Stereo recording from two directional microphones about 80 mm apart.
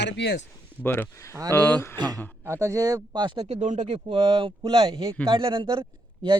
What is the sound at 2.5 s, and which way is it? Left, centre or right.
Speech, right.